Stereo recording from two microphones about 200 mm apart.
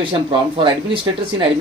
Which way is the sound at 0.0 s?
25° right (ahead or behind).